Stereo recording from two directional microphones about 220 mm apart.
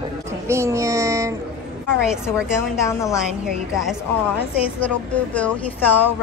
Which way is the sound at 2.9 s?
15° left (ahead or behind).